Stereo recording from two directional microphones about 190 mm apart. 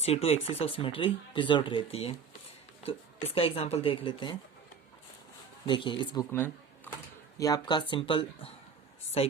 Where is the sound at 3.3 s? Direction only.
30° left (ahead or behind).